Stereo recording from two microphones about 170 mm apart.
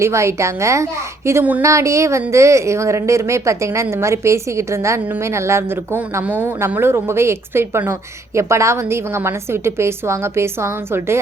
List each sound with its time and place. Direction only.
0.0 s a woman's voice: 15° right (ahead or behind)